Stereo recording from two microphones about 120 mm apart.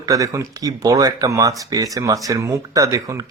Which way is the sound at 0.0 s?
30° right (ahead or behind).